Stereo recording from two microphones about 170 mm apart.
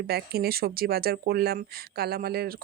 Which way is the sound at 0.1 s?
65° right (ahead or behind).